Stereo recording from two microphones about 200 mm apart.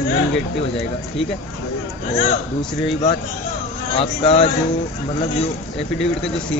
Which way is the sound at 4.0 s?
30° left (ahead or behind).